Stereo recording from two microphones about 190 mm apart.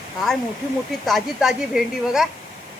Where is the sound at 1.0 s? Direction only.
Centre (ahead or behind).